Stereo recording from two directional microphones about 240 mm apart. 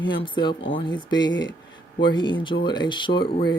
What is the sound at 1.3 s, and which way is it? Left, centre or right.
Speech, left.